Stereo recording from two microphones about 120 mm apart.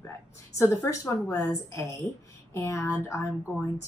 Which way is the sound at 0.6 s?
25° left (ahead or behind).